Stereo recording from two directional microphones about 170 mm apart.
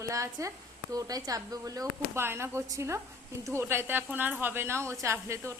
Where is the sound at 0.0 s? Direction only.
20° right (ahead or behind).